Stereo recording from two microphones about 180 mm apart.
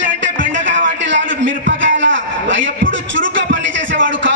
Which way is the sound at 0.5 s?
90° right.